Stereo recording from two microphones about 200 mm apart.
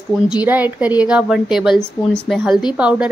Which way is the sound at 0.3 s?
10° right (ahead or behind).